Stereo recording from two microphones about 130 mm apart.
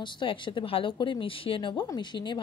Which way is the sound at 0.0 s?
35° left (ahead or behind).